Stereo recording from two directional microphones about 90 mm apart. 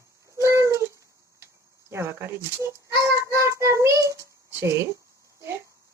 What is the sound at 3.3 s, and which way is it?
Speech, 30° right (ahead or behind).